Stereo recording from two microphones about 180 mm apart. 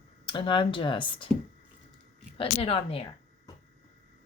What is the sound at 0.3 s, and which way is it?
Speech, 25° left (ahead or behind).